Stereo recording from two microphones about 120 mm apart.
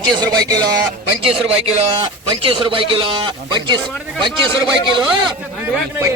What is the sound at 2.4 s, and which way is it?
A man's voice, 45° right (ahead or behind).